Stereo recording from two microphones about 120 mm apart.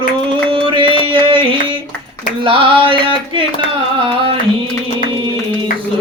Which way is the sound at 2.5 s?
45° right (ahead or behind).